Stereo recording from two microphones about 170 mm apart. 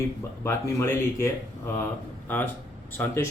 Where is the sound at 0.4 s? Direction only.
15° left (ahead or behind).